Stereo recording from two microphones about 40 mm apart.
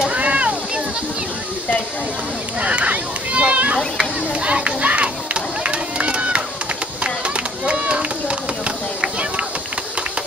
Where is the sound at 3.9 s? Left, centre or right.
Right.